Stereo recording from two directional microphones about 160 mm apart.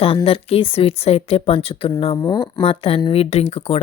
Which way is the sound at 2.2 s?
25° left (ahead or behind).